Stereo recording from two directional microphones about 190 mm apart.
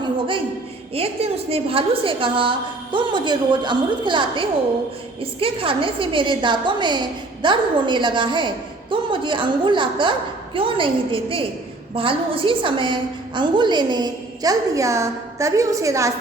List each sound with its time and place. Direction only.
0.9 s a woman's voice: 30° right (ahead or behind)